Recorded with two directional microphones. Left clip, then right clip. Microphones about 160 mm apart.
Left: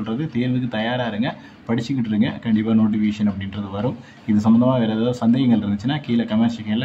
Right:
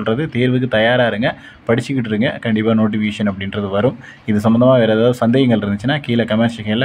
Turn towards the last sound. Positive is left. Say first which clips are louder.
# right 5 dB
turn(degrees=-30)  # may be behind; listen again after turning